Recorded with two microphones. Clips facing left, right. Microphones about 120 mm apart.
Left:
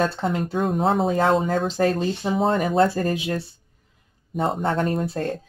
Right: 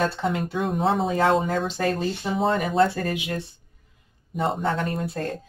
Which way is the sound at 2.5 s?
40° left (ahead or behind).